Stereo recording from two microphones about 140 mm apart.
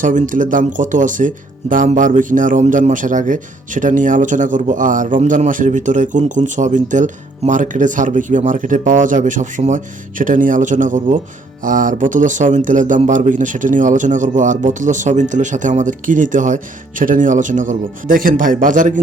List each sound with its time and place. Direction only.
0.0 s a man's voice: 65° right (ahead or behind)